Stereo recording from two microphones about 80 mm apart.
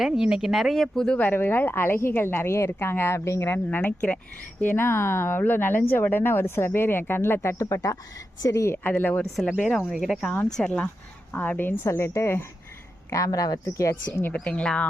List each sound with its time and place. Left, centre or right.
0.0 s speech: centre
1.2 s speech: left
3.8 s speech: centre
4.6 s speech: left
8.6 s a woman's voice: left
8.9 s speech: centre
9.5 s speech: centre
10.6 s speech: centre
11.3 s a woman's voice: left
13.1 s a woman's voice: left
14.4 s speech: centre